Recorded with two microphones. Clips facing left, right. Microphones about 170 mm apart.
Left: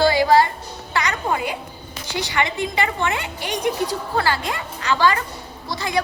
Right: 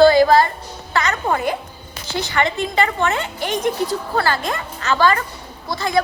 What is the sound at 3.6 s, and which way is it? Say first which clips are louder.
Speech: even; 45° right (ahead or behind).